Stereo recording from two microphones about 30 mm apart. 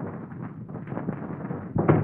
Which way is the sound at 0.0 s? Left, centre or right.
Centre.